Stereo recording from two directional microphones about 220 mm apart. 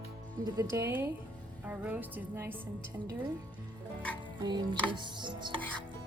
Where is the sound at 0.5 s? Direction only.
10° right (ahead or behind).